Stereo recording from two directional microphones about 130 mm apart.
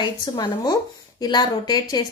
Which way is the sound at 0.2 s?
30° left (ahead or behind).